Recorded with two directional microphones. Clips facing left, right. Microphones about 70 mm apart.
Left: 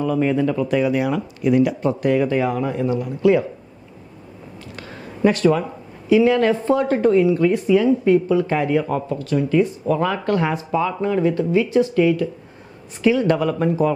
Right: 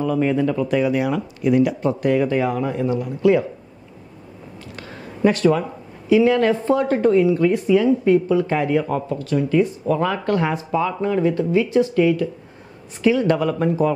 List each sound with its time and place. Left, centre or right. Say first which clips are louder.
0.0 s speech: even; left
5.3 s speech: even; centre